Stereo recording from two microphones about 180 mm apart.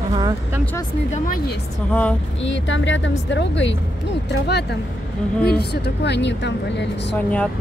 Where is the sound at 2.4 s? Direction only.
90° left.